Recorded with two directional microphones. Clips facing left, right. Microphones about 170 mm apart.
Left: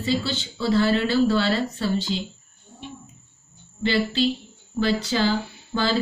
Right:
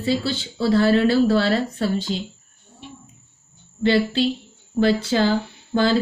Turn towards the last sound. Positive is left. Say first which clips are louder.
# right 5 dB
turn(degrees=-50)  # may be behind; listen again after turning